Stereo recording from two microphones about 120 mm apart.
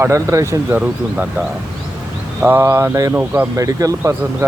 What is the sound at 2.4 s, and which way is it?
Speech, 20° right (ahead or behind).